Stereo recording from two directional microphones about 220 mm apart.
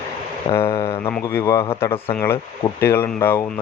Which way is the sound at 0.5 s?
15° left (ahead or behind).